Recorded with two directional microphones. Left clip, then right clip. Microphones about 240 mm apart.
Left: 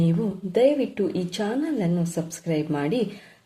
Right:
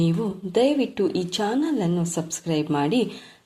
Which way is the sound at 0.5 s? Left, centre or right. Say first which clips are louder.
Left 1 dB; centre.